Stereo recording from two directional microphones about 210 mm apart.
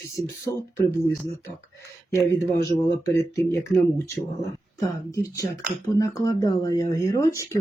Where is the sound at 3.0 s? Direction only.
15° left (ahead or behind).